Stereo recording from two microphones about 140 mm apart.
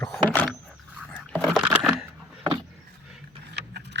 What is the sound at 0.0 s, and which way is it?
Vehicle, 10° left (ahead or behind).